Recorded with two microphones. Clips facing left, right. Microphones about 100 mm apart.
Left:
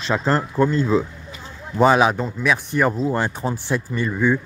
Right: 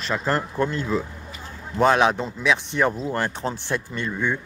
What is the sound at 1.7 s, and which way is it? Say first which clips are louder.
A man's voice: left 3 dB; 5° left (ahead or behind).